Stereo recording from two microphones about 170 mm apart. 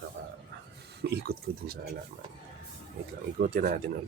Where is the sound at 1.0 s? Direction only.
70° right (ahead or behind).